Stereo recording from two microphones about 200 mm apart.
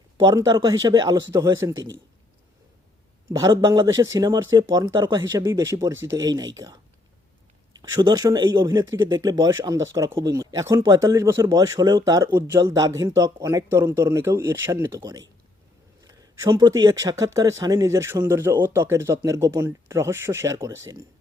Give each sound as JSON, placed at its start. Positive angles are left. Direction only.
{"t": 0.2, "sound": "speech", "side_deg": -20}
{"t": 3.2, "sound": "speech", "side_deg": -20}
{"t": 7.7, "sound": "speech", "side_deg": -20}